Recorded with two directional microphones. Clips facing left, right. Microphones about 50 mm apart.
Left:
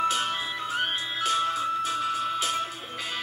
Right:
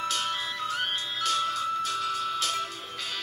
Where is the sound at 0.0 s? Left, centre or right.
Centre.